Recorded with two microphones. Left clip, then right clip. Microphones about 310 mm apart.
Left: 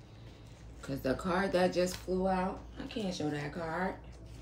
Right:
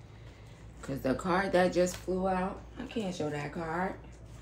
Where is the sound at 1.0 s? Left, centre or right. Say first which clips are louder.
Right 2 dB; centre.